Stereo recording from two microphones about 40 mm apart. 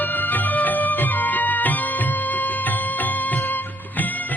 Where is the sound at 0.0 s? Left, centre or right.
Left.